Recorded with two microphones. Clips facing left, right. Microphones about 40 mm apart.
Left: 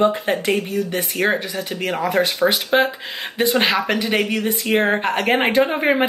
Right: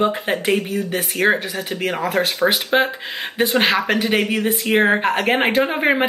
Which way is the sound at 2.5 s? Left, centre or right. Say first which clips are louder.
Even; centre.